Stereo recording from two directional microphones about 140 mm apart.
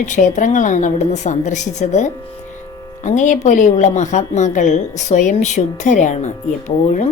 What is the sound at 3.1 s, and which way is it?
A woman's voice, 65° left (ahead or behind).